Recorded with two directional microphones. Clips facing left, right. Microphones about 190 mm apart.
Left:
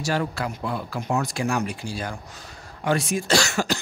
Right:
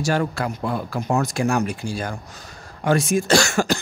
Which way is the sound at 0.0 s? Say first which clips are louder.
Right 4 dB; 45° right (ahead or behind).